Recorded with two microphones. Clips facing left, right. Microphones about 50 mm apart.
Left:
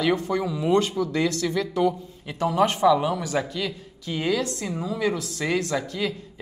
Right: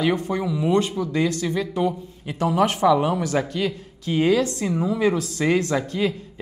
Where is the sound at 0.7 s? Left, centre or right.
Right.